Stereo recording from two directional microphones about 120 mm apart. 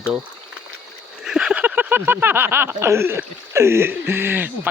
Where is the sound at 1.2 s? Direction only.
5° right (ahead or behind).